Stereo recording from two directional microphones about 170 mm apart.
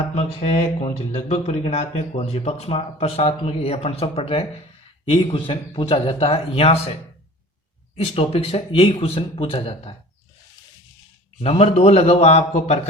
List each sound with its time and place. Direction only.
0.3 s speech: 35° left (ahead or behind)
7.9 s speech: 35° left (ahead or behind)
11.3 s speech: 35° left (ahead or behind)